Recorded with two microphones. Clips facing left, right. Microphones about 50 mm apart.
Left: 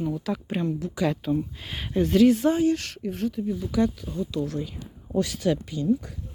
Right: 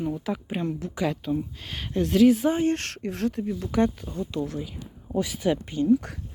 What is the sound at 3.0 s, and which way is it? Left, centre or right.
Speech, right.